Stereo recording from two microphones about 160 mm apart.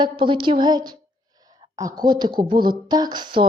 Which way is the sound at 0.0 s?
30° right (ahead or behind).